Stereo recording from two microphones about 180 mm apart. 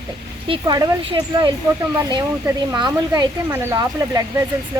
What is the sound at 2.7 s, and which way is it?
Speech, 25° right (ahead or behind).